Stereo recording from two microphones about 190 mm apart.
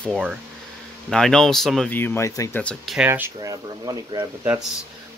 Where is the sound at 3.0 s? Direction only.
10° right (ahead or behind).